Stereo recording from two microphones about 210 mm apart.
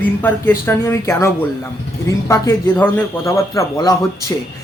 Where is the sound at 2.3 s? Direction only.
15° left (ahead or behind).